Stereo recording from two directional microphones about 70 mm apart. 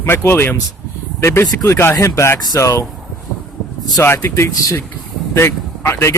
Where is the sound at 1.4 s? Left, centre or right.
Left.